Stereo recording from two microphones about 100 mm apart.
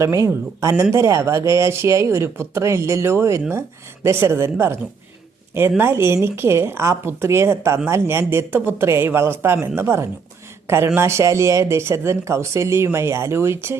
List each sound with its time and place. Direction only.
0.0 s speech: 30° right (ahead or behind)